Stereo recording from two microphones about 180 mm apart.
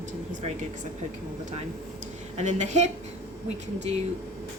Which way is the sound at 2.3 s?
40° right (ahead or behind).